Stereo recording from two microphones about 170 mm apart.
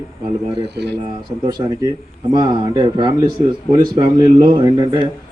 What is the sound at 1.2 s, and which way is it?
Speech, 25° right (ahead or behind).